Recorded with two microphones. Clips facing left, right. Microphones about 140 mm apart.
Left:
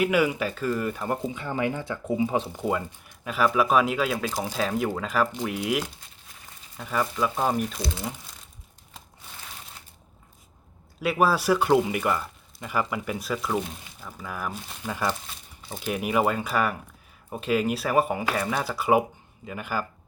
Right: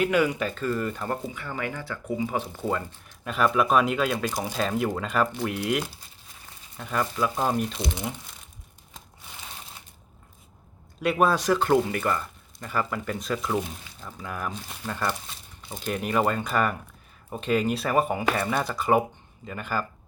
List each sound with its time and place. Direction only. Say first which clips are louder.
0.0 s speech: even; 10° left (ahead or behind)
1.3 s speech: left 5 dB; 20° left (ahead or behind); by 7.6 s centre (ahead or behind)
7.7 s speech: right 1 dB; 20° right (ahead or behind)
11.0 s speech: even; 5° left (ahead or behind)